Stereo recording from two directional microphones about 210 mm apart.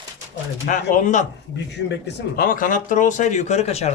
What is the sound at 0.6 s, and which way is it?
Speech, 35° left (ahead or behind).